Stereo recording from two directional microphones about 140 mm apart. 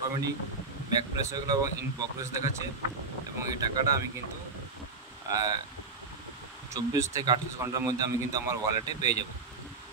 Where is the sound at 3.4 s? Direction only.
25° right (ahead or behind).